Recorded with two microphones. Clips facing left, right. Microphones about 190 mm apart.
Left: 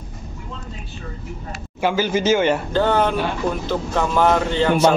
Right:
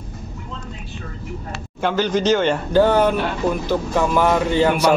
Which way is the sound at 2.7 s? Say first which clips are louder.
Right 3 dB; 10° right (ahead or behind).